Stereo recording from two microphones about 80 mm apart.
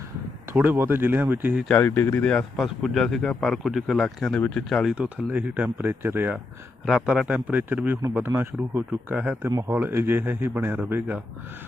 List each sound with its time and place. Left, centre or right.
0.5 s speech: right
1.8 s speech: left
2.6 s speech: centre
4.8 s a man's voice: centre
5.0 s speech: centre
6.8 s a man's voice: centre
9.6 s speech: right
9.8 s speech: right